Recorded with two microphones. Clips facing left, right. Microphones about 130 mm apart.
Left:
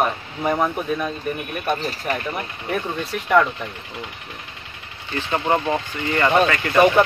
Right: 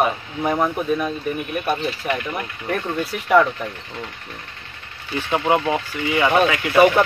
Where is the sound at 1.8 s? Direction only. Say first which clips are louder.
Right 2 dB; 40° left (ahead or behind).